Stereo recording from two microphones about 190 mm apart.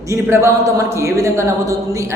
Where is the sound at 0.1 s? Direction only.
15° right (ahead or behind).